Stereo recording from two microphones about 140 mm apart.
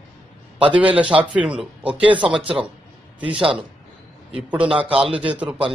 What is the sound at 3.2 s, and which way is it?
Speech, 40° right (ahead or behind).